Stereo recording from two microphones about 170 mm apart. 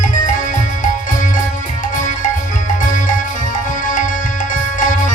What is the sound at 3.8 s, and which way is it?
Tabla, 50° left (ahead or behind).